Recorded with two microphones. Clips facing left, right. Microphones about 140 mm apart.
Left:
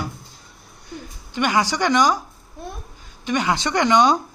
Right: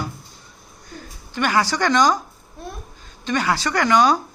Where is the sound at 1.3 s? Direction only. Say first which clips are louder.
Even; 15° left (ahead or behind).